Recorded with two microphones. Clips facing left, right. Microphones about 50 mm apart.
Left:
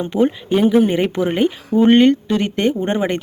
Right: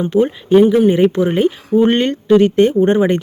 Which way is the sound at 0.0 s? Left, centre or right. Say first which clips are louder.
Right 2 dB; centre.